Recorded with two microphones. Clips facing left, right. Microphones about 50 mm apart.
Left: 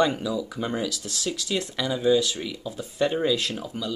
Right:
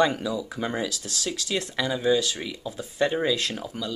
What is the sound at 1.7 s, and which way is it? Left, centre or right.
Speech, centre.